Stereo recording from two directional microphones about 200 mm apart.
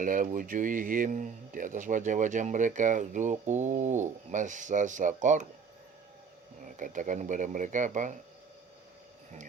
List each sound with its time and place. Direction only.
0.0 s speech: 40° right (ahead or behind)
6.7 s speech: 40° right (ahead or behind)